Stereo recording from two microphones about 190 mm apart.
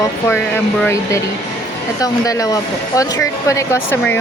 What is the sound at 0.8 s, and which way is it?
Speech, 15° left (ahead or behind).